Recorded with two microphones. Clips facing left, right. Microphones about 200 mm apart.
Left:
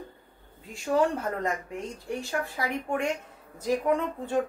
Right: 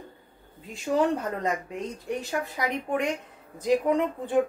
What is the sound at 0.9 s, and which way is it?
A woman's voice, 20° right (ahead or behind).